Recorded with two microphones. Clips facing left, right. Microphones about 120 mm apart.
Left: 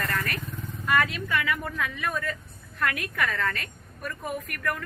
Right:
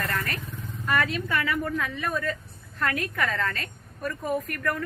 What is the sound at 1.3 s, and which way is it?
Speech, 35° right (ahead or behind).